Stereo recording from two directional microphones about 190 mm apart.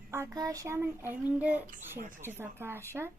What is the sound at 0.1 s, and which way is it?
Speech, 15° right (ahead or behind).